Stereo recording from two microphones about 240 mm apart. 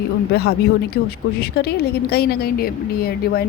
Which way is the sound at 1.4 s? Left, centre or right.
Left.